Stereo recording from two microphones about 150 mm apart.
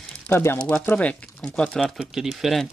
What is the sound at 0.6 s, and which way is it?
Speech, 15° left (ahead or behind).